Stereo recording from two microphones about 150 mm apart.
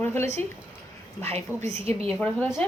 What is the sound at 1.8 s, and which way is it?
Speech, 40° right (ahead or behind).